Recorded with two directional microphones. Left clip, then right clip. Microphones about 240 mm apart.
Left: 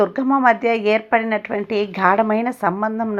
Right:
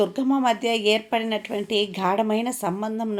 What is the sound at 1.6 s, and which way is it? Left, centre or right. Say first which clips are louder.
Speech: left 2 dB; left.